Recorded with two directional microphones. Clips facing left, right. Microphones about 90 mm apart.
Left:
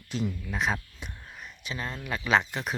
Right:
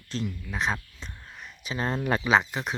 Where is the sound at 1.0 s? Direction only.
5° left (ahead or behind).